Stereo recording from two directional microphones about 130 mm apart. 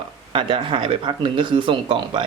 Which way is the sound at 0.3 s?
40° right (ahead or behind).